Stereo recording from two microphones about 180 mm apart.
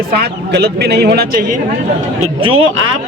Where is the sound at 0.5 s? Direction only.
65° right (ahead or behind).